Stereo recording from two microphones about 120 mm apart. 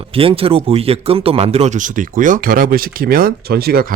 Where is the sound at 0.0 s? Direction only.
50° right (ahead or behind); by 2.4 s 90° right.